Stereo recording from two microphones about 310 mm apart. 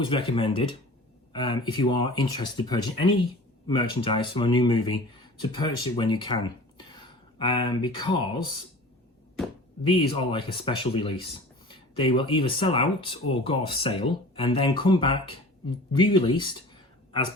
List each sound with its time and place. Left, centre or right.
0.0 s speech: centre
9.9 s speech: centre